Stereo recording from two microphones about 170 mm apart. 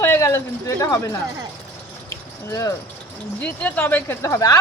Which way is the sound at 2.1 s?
20° left (ahead or behind).